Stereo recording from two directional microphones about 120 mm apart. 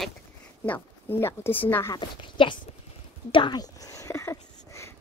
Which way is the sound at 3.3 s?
40° left (ahead or behind).